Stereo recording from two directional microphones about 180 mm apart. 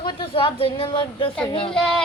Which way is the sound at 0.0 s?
25° left (ahead or behind).